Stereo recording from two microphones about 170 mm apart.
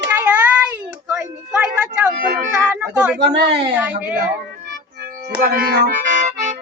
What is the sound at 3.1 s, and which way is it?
Speech, 85° right.